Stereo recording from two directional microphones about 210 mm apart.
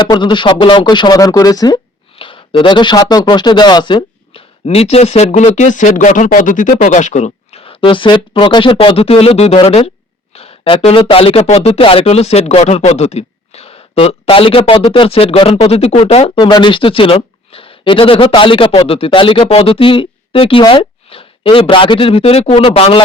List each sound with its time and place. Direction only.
0.0 s speech: 20° left (ahead or behind)